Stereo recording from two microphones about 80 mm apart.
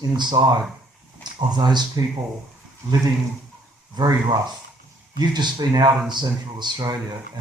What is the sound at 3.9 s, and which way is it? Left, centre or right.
Speech, right.